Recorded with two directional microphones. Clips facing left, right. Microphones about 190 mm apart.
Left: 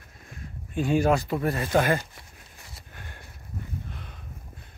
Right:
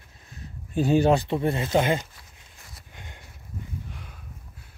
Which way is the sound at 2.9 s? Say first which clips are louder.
Even; 15° right (ahead or behind).